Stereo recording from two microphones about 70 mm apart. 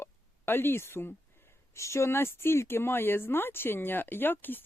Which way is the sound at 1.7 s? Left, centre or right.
Left.